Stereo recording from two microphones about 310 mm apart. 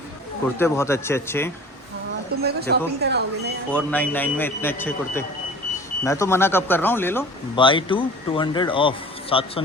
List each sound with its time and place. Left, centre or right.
0.4 s speech: centre
2.4 s speech: right
3.7 s a man's voice: centre